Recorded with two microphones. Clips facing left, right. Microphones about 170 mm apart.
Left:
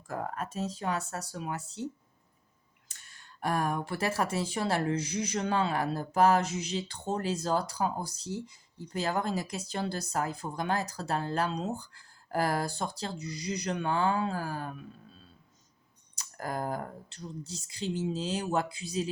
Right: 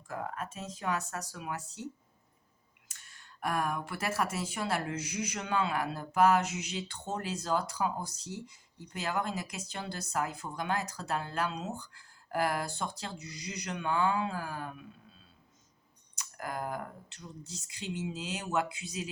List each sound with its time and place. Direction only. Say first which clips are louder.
0.1 s speech: left 3 dB; 40° left (ahead or behind)
3.4 s speech: left 3 dB; 30° left (ahead or behind)
16.1 s speech: left 3 dB; 35° left (ahead or behind)